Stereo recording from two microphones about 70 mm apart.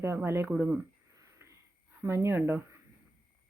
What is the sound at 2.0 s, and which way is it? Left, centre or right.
Speech, right.